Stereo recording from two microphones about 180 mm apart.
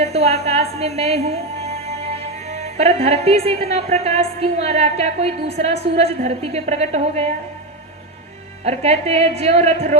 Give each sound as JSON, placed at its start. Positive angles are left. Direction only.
{"t": 0.0, "sound": "a woman's voice", "side_deg": -35}
{"t": 8.6, "sound": "a woman's voice", "side_deg": -35}